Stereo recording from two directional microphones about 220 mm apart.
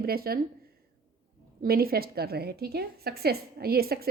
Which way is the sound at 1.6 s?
45° right (ahead or behind).